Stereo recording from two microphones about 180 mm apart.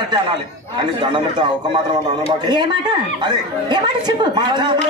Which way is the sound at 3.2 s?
25° right (ahead or behind).